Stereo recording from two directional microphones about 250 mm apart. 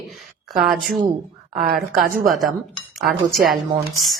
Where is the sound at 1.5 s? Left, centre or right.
Right.